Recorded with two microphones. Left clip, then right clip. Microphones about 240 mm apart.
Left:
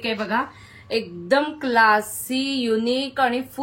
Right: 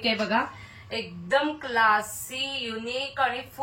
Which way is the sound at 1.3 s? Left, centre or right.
Left.